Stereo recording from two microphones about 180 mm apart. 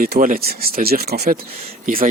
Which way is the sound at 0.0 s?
50° right (ahead or behind).